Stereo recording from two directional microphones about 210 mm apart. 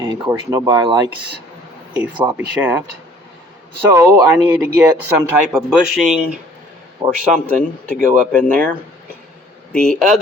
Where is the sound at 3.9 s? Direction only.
10° right (ahead or behind).